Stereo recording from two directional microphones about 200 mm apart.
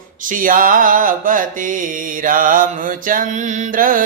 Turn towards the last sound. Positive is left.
turn(degrees=-45)  # may be behind; listen again after turning